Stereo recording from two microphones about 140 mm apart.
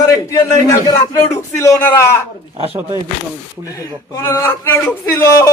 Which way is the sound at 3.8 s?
20° left (ahead or behind).